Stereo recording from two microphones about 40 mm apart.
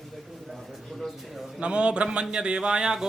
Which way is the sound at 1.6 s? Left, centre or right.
Right.